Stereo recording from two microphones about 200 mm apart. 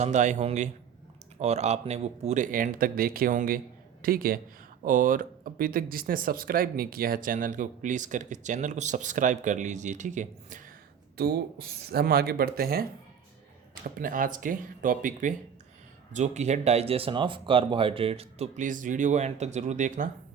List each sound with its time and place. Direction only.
0.0 s speech: 35° right (ahead or behind)
11.2 s speech: 50° right (ahead or behind)
14.0 s speech: 40° right (ahead or behind)